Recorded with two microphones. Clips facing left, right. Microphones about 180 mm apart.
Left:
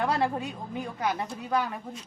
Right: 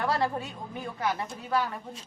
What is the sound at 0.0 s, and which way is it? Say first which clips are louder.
A woman's voice: left 1 dB; 20° left (ahead or behind).